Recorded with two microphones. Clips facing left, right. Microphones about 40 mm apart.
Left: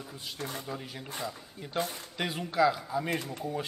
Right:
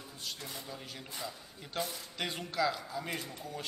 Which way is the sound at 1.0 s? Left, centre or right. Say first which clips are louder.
Left 5 dB; left.